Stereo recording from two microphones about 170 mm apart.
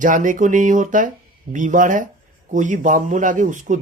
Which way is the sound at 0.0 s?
50° right (ahead or behind).